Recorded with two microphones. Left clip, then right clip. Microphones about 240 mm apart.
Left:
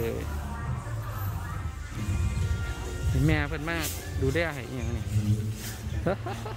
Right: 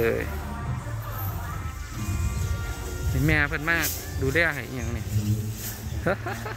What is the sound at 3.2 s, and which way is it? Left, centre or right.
Speech, centre.